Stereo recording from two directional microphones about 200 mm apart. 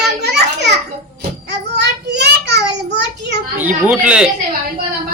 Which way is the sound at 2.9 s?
60° right (ahead or behind).